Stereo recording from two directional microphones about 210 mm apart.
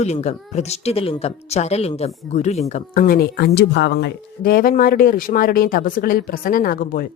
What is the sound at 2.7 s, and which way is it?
Speech, 45° left (ahead or behind).